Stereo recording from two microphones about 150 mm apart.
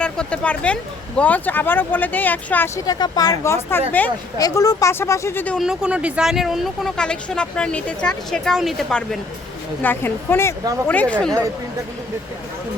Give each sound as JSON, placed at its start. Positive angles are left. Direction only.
{"t": 0.0, "sound": "speech", "side_deg": 5}
{"t": 2.8, "sound": "speech", "side_deg": 25}
{"t": 5.5, "sound": "speech", "side_deg": -5}